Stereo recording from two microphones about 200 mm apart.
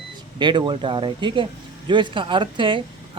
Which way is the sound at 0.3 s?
20° right (ahead or behind).